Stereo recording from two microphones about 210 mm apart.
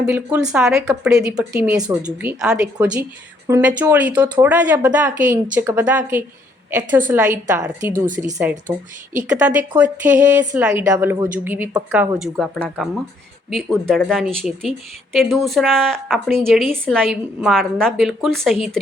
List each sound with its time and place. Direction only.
0.0 s a woman's voice: 5° right (ahead or behind)
7.9 s speech: 40° right (ahead or behind)
9.2 s a woman's voice: 5° right (ahead or behind)